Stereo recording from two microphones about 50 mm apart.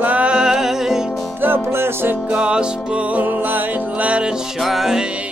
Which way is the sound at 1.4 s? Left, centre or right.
Right.